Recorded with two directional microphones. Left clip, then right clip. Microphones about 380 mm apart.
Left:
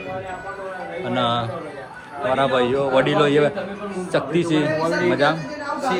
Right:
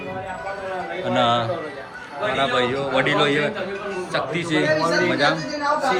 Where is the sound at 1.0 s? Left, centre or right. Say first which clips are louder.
Right 3 dB; centre.